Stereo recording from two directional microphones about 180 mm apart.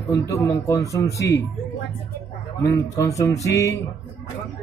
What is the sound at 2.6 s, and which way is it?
Mantra, 15° left (ahead or behind).